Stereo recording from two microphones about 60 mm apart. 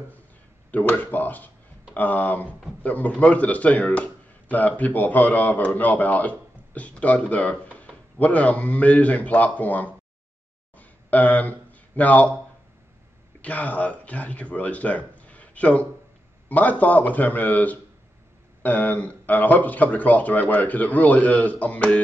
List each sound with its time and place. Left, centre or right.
0.8 s speech: left
10.8 s a sound: left
13.4 s speech: left